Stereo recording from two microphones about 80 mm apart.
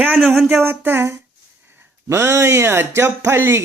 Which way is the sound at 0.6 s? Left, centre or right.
Right.